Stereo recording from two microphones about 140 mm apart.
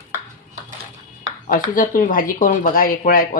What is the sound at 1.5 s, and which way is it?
Speech, 85° left.